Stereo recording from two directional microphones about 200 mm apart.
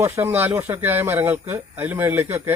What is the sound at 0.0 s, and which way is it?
Speech, 10° right (ahead or behind).